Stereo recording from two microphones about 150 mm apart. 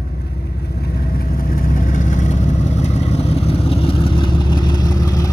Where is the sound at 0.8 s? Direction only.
80° left.